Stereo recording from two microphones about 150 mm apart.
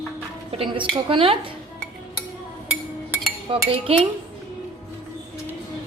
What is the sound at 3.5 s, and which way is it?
Speech, 40° right (ahead or behind).